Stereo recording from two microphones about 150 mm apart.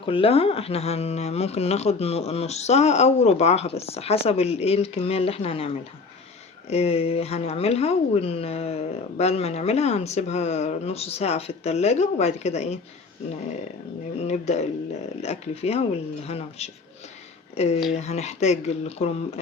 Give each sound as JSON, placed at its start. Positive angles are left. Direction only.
{"t": 0.0, "sound": "speech", "side_deg": 35}
{"t": 14.3, "sound": "speech", "side_deg": 50}